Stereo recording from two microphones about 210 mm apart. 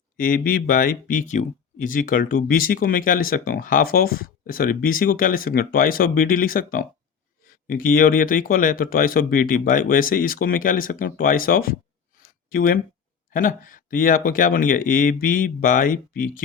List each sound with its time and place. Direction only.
0.2 s speech: 45° left (ahead or behind)
12.2 s a sound: 45° left (ahead or behind)
13.3 s speech: 40° left (ahead or behind)